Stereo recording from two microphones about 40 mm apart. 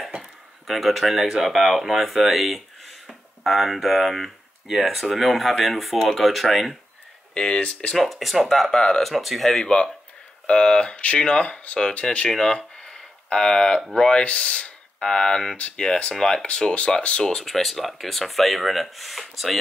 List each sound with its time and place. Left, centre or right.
0.2 s speech: centre
7.3 s speech: centre
7.9 s speech: centre
10.4 s speech: left
12.4 s a sound: centre
13.9 s speech: left
15.0 s speech: centre
17.2 s speech: centre